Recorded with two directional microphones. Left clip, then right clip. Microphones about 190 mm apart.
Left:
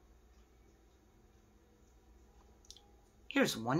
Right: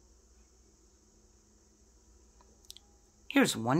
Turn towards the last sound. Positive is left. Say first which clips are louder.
# right 5 dB
turn(degrees=-50)  # may be behind; listen again after turning